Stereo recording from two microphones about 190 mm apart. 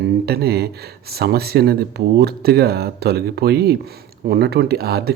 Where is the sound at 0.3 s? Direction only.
55° right (ahead or behind).